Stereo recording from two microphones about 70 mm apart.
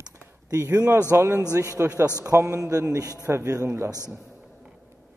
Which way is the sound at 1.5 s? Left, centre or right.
Right.